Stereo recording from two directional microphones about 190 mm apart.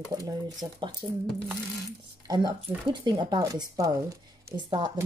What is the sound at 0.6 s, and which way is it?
Speech, 20° right (ahead or behind).